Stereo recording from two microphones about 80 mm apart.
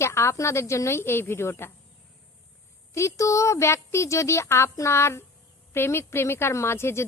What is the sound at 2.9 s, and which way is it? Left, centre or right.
A woman's voice, left.